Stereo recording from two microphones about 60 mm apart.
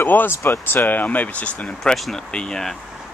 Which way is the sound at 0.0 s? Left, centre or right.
Left.